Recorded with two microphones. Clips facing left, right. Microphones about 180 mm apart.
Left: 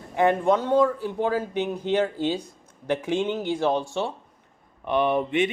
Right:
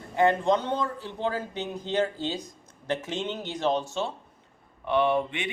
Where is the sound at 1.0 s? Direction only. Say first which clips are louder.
Left 5 dB; 15° left (ahead or behind).